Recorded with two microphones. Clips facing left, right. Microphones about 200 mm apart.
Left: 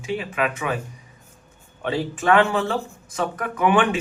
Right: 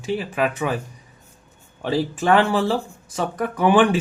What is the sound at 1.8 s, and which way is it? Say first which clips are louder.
Speech: right 1 dB; 35° right (ahead or behind).